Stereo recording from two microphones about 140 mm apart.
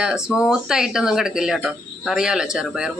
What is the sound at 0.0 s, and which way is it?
Speech, 5° right (ahead or behind).